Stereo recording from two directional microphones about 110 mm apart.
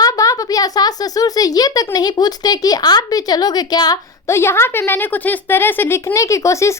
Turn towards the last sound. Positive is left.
turn(degrees=25)  # may be behind; listen again after turning